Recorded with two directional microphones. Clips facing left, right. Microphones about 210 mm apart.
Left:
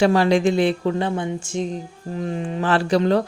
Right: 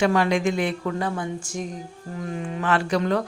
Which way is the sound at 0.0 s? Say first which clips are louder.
Left 4 dB; 30° left (ahead or behind).